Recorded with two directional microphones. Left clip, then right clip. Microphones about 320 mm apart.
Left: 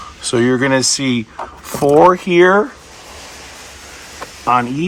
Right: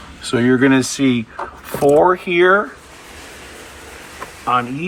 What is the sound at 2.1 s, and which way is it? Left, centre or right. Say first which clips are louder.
Speech: left 2 dB; left.